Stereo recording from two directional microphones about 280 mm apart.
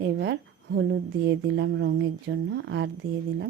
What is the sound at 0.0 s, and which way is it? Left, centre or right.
Speech, right.